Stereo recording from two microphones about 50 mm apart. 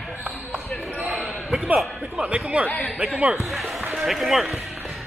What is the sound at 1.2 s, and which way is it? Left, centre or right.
Basketball bounce, centre.